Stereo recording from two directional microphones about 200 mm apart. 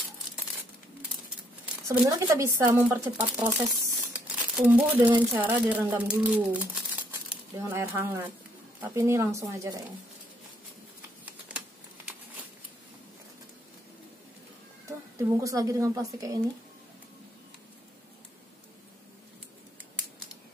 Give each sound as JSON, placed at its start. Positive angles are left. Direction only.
{"t": 1.9, "sound": "speech", "side_deg": -15}
{"t": 4.1, "sound": "crumpling", "side_deg": -5}
{"t": 5.1, "sound": "speech", "side_deg": -10}
{"t": 11.5, "sound": "typing", "side_deg": -5}
{"t": 14.9, "sound": "speech", "side_deg": -15}